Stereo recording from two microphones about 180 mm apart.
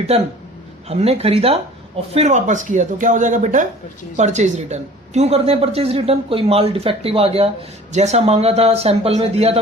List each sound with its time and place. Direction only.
0.1 s a woman's voice: 35° right (ahead or behind)